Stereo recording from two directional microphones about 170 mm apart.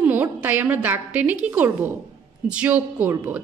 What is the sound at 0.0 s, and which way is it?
A woman's voice, 10° right (ahead or behind).